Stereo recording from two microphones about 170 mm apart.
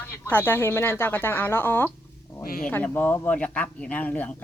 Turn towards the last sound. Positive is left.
turn(degrees=10)  # may be behind; listen again after turning